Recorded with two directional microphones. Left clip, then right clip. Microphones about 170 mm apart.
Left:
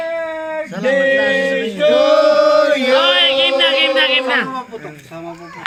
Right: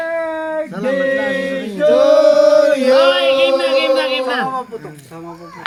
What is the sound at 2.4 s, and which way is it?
Chant, 40° right (ahead or behind).